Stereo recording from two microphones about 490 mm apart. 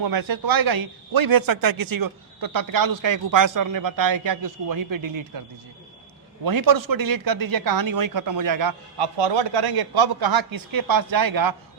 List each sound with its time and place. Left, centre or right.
0.0 s a man's voice: right
6.4 s a man's voice: right
9.1 s speech: right